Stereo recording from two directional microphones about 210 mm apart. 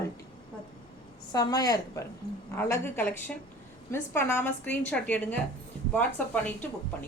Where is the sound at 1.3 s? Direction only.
20° left (ahead or behind).